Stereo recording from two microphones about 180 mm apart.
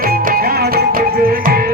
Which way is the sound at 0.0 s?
50° right (ahead or behind).